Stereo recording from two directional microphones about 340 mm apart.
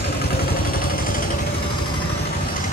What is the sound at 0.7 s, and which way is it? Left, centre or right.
Vehicle, left.